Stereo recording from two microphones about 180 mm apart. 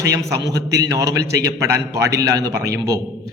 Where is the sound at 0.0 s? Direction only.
15° right (ahead or behind).